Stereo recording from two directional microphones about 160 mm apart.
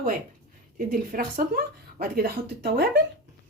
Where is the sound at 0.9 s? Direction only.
60° right (ahead or behind); by 3.0 s 90° right.